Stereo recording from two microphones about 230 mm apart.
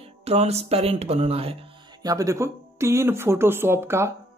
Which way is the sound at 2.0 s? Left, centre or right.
Centre.